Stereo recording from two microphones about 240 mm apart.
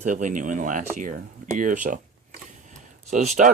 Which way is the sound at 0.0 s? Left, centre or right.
Right.